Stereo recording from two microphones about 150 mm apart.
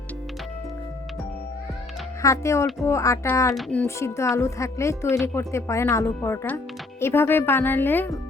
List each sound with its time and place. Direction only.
2.2 s speech: 20° left (ahead or behind)
3.5 s speech: 5° left (ahead or behind)